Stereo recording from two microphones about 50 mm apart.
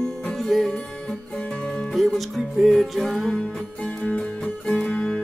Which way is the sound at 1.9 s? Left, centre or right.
Centre.